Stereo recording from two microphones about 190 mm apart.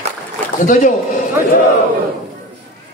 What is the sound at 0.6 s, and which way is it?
Speech, 40° left (ahead or behind).